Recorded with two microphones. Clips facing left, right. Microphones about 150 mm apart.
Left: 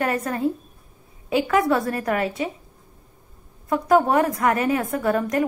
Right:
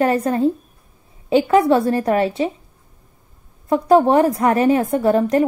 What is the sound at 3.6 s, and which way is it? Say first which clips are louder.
A woman's voice: right 5 dB; 30° right (ahead or behind).